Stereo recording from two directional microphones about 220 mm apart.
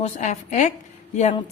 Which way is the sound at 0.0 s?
30° left (ahead or behind).